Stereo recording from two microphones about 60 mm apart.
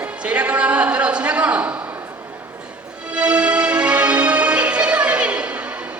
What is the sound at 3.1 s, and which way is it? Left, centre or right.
Music, centre.